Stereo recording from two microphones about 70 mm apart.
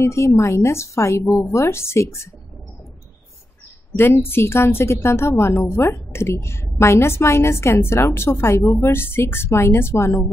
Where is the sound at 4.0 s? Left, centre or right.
Left.